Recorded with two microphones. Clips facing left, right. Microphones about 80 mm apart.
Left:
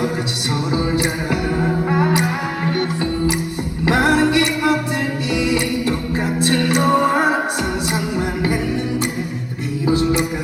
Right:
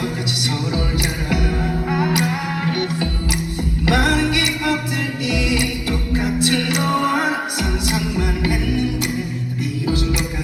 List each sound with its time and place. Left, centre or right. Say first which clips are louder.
1.9 s music: left 1 dB; left
3.8 s music: left 3 dB; left
9.8 s music: left 6 dB; left